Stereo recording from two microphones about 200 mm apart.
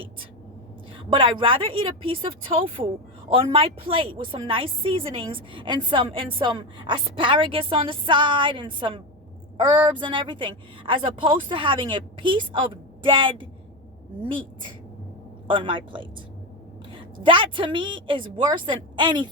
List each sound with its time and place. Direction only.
0.9 s a woman's voice: 25° right (ahead or behind)
17.2 s a woman's voice: 25° right (ahead or behind)